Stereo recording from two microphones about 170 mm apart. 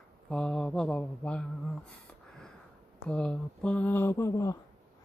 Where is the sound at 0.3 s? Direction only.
5° left (ahead or behind).